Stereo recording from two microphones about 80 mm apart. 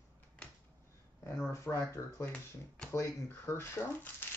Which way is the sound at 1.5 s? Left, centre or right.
Left.